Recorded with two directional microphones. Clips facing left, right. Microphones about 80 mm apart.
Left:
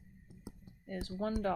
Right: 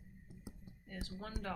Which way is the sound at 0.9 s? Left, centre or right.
Left.